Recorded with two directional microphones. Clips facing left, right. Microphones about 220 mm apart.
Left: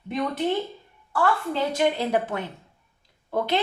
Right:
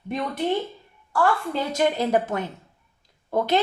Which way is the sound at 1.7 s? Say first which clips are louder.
Right 3 dB; 45° right (ahead or behind).